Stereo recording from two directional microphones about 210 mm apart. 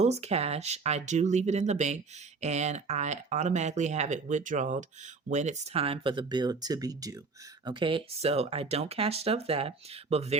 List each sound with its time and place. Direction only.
0.0 s speech: 30° right (ahead or behind)